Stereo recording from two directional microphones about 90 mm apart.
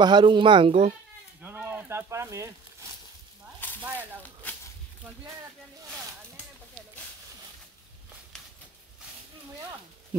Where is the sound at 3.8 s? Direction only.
20° right (ahead or behind).